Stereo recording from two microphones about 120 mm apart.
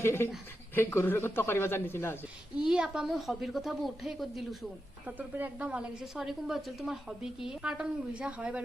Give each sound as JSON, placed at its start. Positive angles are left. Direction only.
{"t": 0.0, "sound": "speech", "side_deg": 20}
{"t": 2.6, "sound": "a woman's voice", "side_deg": -5}
{"t": 5.0, "sound": "a woman's voice", "side_deg": -15}